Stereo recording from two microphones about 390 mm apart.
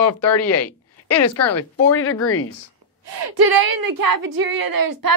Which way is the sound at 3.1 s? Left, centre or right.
Right.